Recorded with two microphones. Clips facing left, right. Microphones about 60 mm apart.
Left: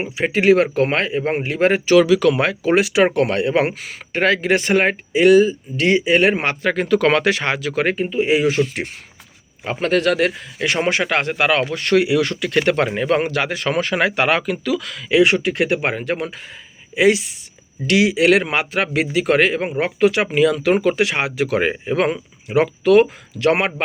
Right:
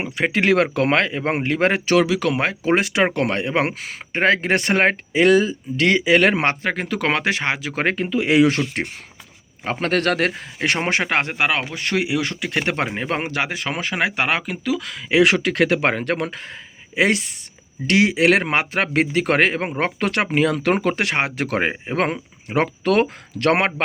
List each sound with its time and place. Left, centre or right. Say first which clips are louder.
0.2 s speech: left 3 dB; right
2.0 s speech: left 7 dB; right
2.7 s speech: left 5 dB; right
3.3 s a man's voice: left 3 dB; right
4.4 s speech: left 2 dB; right
6.7 s speech: left 6 dB; centre
7.9 s speech: right 1 dB; right
9.6 s a man's voice: left 2 dB; right
11.3 s speech: left 4 dB; centre
12.3 s speech: left 5 dB; right
15.2 s speech: even; right
16.9 s a man's voice: left 4 dB; right